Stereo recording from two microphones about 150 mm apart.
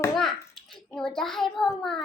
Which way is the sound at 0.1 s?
Centre (ahead or behind).